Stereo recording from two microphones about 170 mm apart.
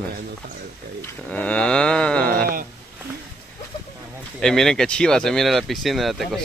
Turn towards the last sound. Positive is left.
turn(degrees=0)  # may be behind; listen again after turning